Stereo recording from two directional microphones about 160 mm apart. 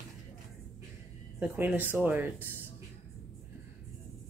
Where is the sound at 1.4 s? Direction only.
10° right (ahead or behind).